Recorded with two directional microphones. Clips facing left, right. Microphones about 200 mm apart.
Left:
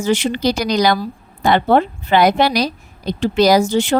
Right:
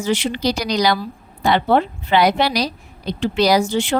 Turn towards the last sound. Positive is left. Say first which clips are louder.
# left 3 dB
turn(degrees=40)  # may be behind; listen again after turning